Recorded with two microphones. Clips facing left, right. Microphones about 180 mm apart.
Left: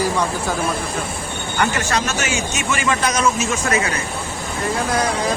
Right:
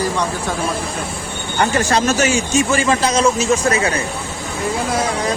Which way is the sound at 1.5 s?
35° right (ahead or behind).